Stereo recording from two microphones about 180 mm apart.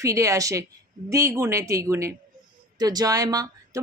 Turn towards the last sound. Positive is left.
turn(degrees=-20)  # may be behind; listen again after turning